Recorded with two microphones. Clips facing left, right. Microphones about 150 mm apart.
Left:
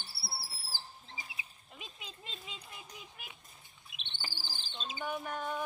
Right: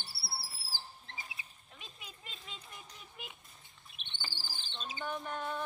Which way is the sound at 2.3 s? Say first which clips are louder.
Left 2 dB; centre (ahead or behind).